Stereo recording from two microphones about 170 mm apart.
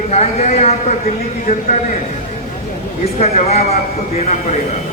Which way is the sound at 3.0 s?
40° left (ahead or behind).